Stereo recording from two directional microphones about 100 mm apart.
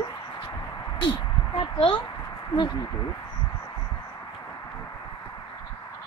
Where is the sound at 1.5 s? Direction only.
60° left (ahead or behind).